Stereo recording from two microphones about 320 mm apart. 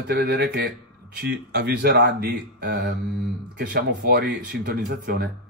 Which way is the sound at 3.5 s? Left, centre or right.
Right.